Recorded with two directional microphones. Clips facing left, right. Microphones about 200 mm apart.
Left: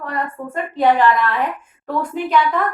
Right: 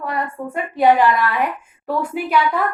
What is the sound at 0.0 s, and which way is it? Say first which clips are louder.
A woman's voice: right 1 dB; 10° right (ahead or behind).